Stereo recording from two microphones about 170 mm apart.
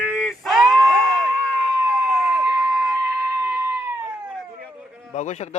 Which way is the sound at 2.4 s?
5° right (ahead or behind).